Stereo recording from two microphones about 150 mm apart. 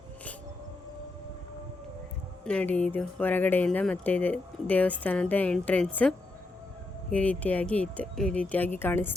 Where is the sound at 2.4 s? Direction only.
5° left (ahead or behind).